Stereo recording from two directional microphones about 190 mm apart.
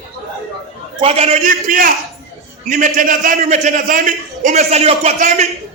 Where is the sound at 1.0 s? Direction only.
30° right (ahead or behind).